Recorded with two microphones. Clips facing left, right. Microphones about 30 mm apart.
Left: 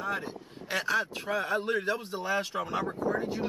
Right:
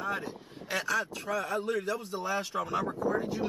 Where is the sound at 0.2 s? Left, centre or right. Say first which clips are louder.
Left 1 dB; left.